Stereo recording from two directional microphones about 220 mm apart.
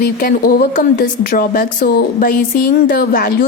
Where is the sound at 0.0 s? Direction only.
40° left (ahead or behind).